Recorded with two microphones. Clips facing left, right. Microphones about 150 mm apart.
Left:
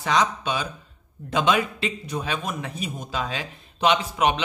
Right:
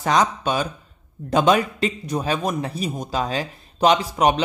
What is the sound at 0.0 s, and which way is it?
A man's voice, 45° right (ahead or behind).